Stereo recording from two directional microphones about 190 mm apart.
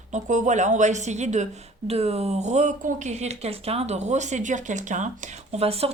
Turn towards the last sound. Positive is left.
turn(degrees=-30)  # may be behind; listen again after turning